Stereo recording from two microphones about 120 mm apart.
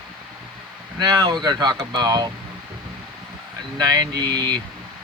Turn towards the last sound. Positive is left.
turn(degrees=-35)  # may be behind; listen again after turning